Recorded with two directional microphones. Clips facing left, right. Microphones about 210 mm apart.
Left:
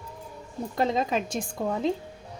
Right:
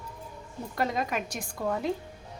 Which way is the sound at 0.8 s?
25° left (ahead or behind).